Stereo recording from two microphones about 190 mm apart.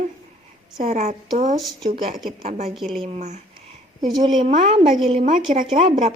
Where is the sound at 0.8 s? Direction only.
40° right (ahead or behind).